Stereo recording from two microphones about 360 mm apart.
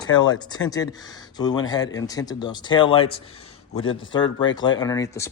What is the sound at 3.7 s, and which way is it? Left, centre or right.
Speech, left.